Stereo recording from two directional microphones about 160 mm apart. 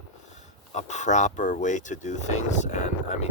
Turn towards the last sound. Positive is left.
turn(degrees=45)  # may be behind; listen again after turning